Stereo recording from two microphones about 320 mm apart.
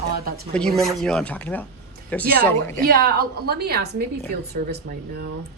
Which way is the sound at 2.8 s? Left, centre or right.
Right.